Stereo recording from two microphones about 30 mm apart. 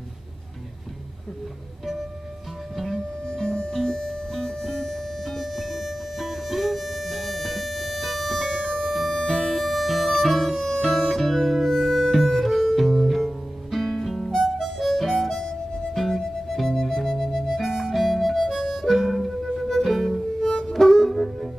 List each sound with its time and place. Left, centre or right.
3.3 s music: left; by 8.4 s centre
8.4 s music: centre
8.8 s music: centre
9.2 s music: centre
9.5 s music: centre
14.8 s harmonica: centre
15.9 s music: centre
17.7 s harmonica: centre
19.8 s music: centre
20.4 s music: centre
21.1 s music: centre